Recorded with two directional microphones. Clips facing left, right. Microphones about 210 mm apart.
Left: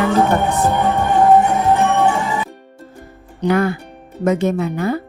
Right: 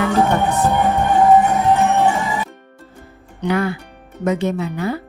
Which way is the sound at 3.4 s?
45° left (ahead or behind).